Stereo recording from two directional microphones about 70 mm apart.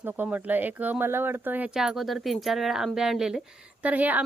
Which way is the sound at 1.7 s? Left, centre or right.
Centre.